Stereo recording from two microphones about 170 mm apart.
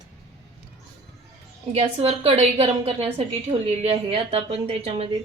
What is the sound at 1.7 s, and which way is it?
A woman's voice, 35° right (ahead or behind).